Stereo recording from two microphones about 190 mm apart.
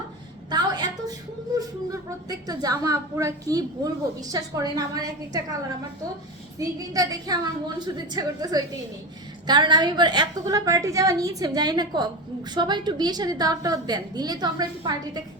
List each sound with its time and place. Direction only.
0.5 s a sound: 20° right (ahead or behind)
2.0 s a woman's voice: 20° right (ahead or behind)
6.6 s a woman's voice: 20° right (ahead or behind)